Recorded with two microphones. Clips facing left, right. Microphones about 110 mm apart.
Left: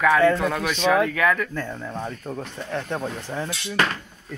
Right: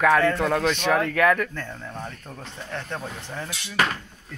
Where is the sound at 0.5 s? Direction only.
55° right (ahead or behind).